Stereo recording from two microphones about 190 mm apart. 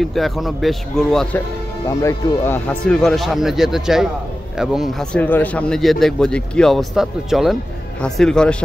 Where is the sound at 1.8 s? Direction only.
15° left (ahead or behind); by 5.2 s centre (ahead or behind).